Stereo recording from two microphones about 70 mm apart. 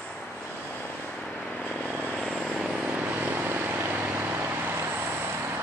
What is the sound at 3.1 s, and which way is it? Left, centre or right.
Vehicle, right.